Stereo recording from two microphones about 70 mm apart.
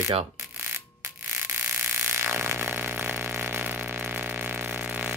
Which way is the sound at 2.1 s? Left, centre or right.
Right.